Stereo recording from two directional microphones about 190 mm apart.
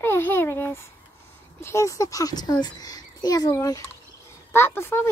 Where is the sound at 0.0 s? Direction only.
10° left (ahead or behind).